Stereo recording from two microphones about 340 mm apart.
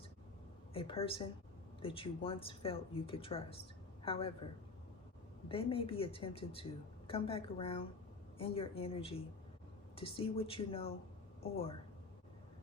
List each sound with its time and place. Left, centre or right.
0.7 s speech: centre
5.5 s speech: centre